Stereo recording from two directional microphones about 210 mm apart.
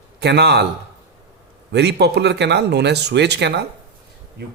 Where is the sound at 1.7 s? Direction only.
55° right (ahead or behind).